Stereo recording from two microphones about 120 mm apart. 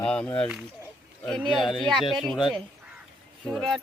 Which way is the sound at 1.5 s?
Centre (ahead or behind).